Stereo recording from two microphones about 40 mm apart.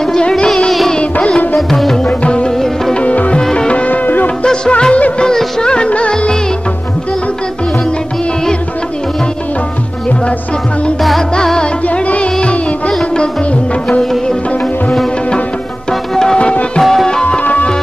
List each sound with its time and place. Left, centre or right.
0.0 s music: centre
0.5 s music: centre
2.2 s music: left
3.8 s music: left
4.4 s music: left
11.0 s music: centre
11.9 s music: left
15.9 s music: centre
17.1 s music: left
17.4 s music: left